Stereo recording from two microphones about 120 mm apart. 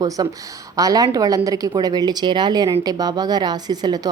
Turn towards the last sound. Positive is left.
turn(degrees=-35)  # may be behind; listen again after turning